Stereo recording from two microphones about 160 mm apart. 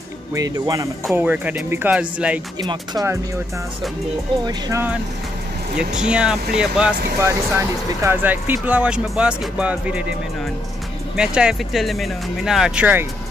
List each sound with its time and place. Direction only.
0.3 s speech: 20° right (ahead or behind)
1.1 s speech: 10° right (ahead or behind)
2.6 s speech: 25° right (ahead or behind)
4.5 s speech: 20° right (ahead or behind)
5.8 s speech: 5° right (ahead or behind)
7.2 s speech: 15° right (ahead or behind)
11.1 s speech: 5° right (ahead or behind)